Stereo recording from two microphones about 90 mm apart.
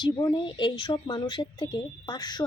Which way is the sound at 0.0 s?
60° left (ahead or behind).